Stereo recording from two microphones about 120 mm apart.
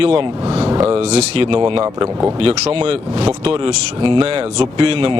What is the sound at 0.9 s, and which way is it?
Speech, 60° right (ahead or behind).